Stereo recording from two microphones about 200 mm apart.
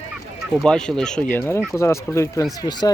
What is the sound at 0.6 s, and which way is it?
Speech, 5° left (ahead or behind).